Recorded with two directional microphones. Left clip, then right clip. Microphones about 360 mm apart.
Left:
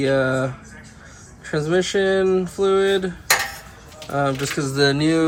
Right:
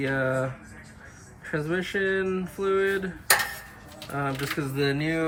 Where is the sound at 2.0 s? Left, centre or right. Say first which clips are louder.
Left 7 dB; left.